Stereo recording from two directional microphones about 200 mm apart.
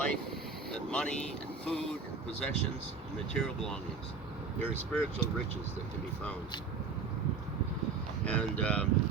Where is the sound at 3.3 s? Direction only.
5° left (ahead or behind).